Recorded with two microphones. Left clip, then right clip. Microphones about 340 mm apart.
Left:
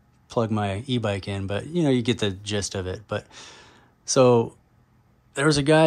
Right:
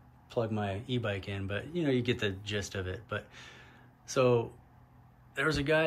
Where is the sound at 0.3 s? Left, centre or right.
Centre.